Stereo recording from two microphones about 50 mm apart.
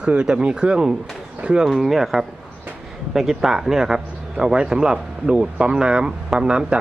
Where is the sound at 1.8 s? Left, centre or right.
Centre.